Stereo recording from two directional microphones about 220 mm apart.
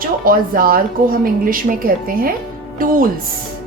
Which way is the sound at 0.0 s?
40° right (ahead or behind).